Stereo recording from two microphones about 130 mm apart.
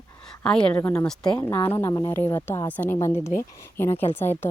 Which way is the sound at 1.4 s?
15° left (ahead or behind).